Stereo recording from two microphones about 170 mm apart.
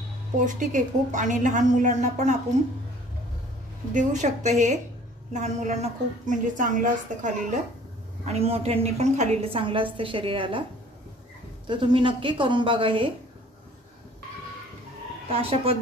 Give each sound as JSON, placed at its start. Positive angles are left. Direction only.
{"t": 0.5, "sound": "a woman's voice", "side_deg": -45}
{"t": 3.9, "sound": "a woman's voice", "side_deg": -45}
{"t": 8.3, "sound": "a woman's voice", "side_deg": -35}
{"t": 11.6, "sound": "a woman's voice", "side_deg": -30}
{"t": 15.3, "sound": "a woman's voice", "side_deg": -35}